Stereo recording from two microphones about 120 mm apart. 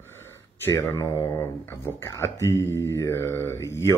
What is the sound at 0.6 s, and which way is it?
Speech, 20° left (ahead or behind).